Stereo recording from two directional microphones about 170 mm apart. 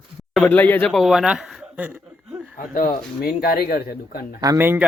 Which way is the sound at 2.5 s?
55° left (ahead or behind).